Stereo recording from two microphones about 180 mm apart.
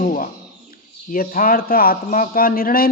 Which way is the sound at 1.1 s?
50° left (ahead or behind).